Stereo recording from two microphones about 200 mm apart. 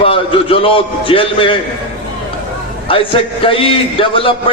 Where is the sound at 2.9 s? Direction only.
25° left (ahead or behind).